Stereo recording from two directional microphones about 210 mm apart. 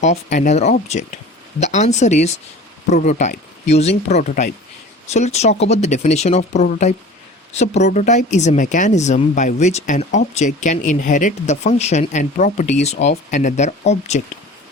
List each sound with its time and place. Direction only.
0.0 s speech: 35° left (ahead or behind)